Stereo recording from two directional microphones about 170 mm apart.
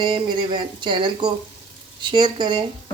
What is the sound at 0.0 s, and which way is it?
Speech, 30° right (ahead or behind).